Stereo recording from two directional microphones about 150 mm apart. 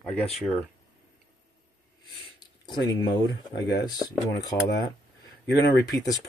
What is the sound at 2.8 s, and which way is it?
Speech, 25° left (ahead or behind).